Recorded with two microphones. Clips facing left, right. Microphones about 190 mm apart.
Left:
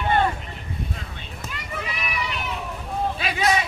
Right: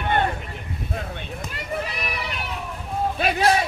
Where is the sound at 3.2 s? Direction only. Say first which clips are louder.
Right 5 dB; 50° right (ahead or behind).